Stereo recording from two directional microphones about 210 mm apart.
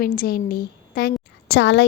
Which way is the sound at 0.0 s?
45° left (ahead or behind).